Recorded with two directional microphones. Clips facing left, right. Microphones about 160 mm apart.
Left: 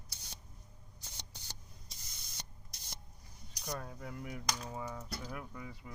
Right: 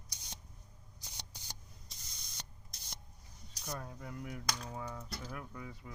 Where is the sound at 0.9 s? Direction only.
10° right (ahead or behind).